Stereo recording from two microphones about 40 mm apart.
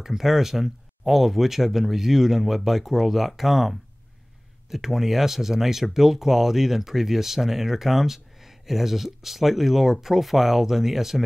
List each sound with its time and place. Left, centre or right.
0.0 s speech: centre